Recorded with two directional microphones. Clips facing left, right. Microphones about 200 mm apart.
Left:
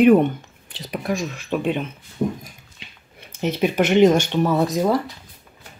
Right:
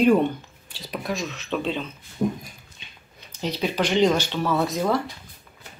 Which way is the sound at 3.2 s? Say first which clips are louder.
Left 5 dB; 55° left (ahead or behind).